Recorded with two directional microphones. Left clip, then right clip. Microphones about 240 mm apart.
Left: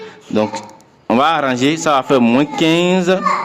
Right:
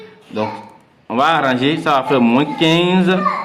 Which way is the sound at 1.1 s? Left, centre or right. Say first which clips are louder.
Left 1 dB; left.